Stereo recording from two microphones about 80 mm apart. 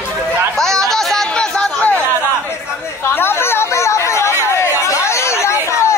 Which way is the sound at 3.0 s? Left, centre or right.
Left.